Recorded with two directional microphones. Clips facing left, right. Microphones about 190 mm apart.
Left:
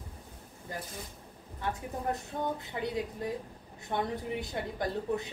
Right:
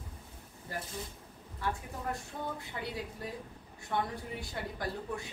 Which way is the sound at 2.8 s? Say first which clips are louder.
Left 6 dB; 25° left (ahead or behind).